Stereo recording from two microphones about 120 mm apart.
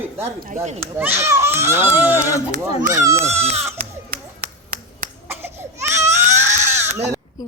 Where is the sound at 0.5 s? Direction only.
70° right (ahead or behind).